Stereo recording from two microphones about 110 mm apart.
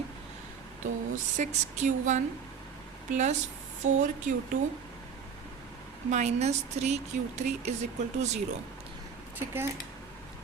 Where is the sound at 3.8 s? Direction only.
90° right.